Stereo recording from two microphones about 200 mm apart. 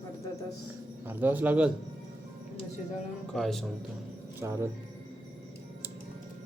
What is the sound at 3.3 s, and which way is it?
Speech, centre (ahead or behind).